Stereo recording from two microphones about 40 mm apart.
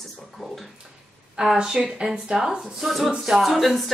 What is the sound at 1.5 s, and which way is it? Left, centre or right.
Speech, centre.